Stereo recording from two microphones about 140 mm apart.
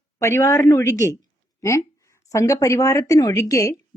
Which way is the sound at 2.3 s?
20° left (ahead or behind).